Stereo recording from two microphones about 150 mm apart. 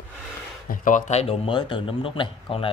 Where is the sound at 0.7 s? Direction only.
60° left (ahead or behind).